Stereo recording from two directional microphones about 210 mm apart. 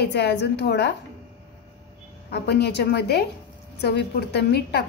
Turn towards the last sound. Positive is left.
turn(degrees=50)  # may be behind; listen again after turning